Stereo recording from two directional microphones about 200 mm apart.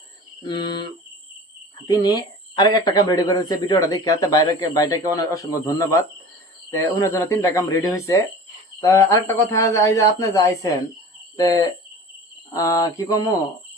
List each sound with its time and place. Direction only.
0.4 s speech: 25° left (ahead or behind)
1.9 s speech: 20° left (ahead or behind)